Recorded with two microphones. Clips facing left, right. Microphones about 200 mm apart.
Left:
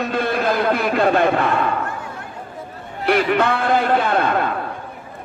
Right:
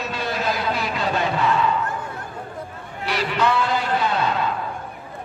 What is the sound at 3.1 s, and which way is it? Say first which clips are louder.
A man's voice: left 5 dB; 55° left (ahead or behind).